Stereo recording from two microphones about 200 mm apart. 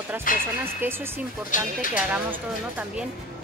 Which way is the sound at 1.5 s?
40° left (ahead or behind).